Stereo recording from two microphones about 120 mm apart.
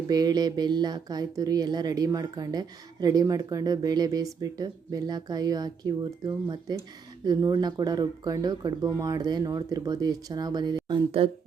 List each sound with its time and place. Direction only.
0.1 s speech: 35° right (ahead or behind)